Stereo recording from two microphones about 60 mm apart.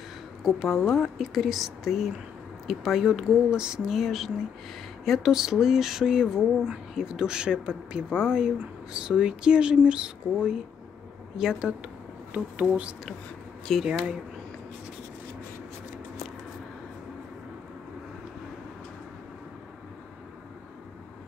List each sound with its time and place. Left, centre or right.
0.4 s speech: centre
12.5 s speech: right
13.7 s speech: centre